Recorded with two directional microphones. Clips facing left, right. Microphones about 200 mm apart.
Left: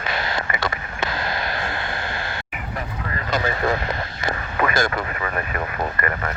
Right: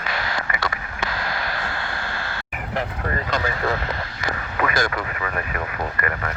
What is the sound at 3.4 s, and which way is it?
Speech, 20° left (ahead or behind).